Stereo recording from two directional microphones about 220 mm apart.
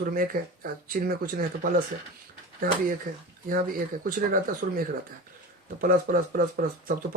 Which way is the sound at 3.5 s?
40° right (ahead or behind).